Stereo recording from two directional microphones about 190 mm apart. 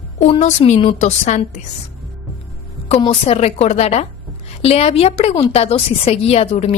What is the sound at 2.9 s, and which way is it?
A woman's voice, 30° left (ahead or behind).